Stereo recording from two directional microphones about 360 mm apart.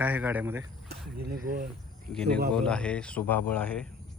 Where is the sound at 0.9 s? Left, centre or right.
Right.